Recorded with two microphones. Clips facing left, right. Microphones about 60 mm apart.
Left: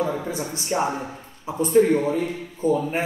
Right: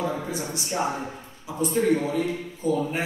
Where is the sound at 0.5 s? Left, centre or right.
Left.